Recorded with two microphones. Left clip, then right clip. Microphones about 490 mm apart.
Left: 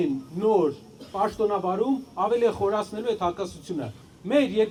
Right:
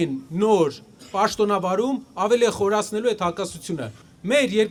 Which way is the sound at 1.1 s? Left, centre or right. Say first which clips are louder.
Right 4 dB; right.